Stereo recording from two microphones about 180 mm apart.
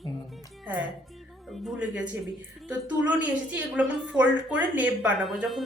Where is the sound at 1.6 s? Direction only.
5° right (ahead or behind).